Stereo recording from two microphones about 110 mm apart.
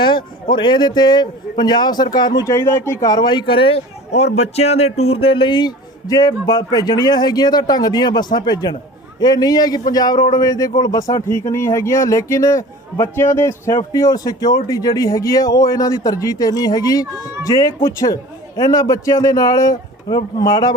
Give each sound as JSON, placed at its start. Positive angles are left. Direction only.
{"t": 0.0, "sound": "speech", "side_deg": 45}
{"t": 2.4, "sound": "speech", "side_deg": 25}
{"t": 4.1, "sound": "speech", "side_deg": 75}